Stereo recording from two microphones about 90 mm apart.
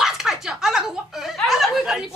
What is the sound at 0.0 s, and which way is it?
Chuckle, 5° right (ahead or behind).